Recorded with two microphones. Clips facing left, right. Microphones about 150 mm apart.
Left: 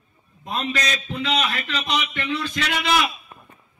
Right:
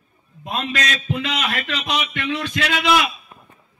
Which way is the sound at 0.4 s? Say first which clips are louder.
Right 1 dB; 65° right (ahead or behind).